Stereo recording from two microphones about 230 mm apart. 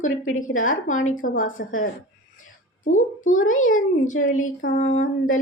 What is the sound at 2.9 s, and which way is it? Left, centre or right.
A woman's voice, left.